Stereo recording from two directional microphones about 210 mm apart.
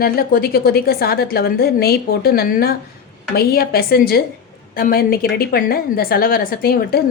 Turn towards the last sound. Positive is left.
turn(degrees=45)  # may be behind; listen again after turning